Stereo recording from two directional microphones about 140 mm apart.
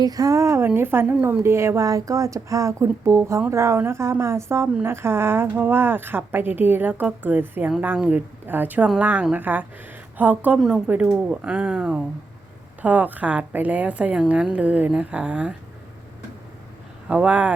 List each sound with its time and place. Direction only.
0.0 s a woman's voice: 25° right (ahead or behind); by 15.5 s 5° right (ahead or behind)
17.1 s a woman's voice: 10° right (ahead or behind)